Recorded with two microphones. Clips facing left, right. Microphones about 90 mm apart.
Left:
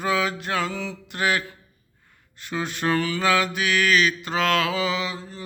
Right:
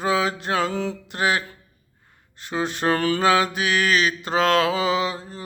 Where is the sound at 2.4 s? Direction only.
35° right (ahead or behind).